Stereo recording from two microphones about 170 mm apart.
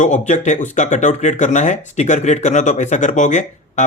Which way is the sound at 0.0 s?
45° left (ahead or behind).